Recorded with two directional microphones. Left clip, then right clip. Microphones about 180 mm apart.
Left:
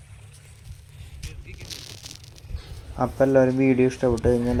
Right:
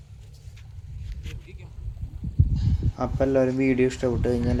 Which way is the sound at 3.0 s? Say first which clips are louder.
Left 4 dB; 20° left (ahead or behind).